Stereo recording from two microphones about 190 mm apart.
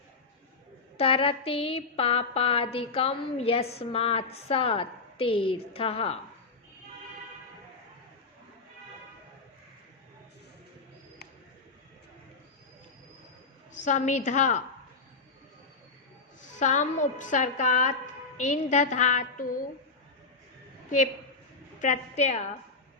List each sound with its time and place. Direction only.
0.9 s a sound: 30° left (ahead or behind)
13.8 s a woman's voice: 40° left (ahead or behind)
16.6 s a woman's voice: 40° left (ahead or behind)
21.8 s a woman's voice: 35° left (ahead or behind)